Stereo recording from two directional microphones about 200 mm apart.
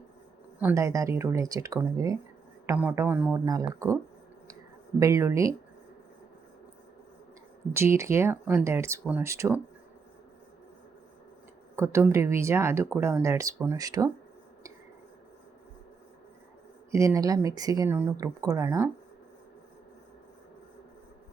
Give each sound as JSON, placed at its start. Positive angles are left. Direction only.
{"t": 0.6, "sound": "speech", "side_deg": -15}
{"t": 4.9, "sound": "speech", "side_deg": -15}
{"t": 7.7, "sound": "speech", "side_deg": -15}
{"t": 11.8, "sound": "speech", "side_deg": -15}
{"t": 16.9, "sound": "speech", "side_deg": -15}